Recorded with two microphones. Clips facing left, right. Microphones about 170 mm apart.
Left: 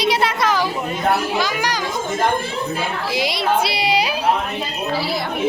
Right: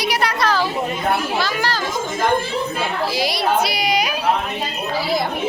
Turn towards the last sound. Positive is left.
turn(degrees=30)  # may be behind; listen again after turning